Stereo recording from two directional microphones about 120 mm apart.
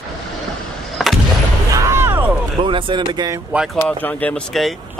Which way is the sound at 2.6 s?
45° right (ahead or behind).